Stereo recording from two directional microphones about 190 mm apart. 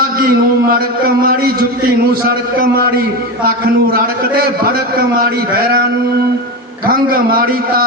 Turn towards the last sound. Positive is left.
turn(degrees=-50)  # may be behind; listen again after turning